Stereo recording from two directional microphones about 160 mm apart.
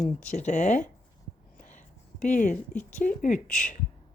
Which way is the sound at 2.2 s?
50° left (ahead or behind).